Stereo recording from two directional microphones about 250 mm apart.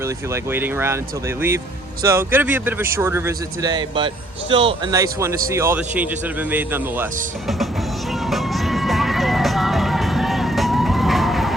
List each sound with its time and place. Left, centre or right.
0.5 s speech: centre
8.3 s music: centre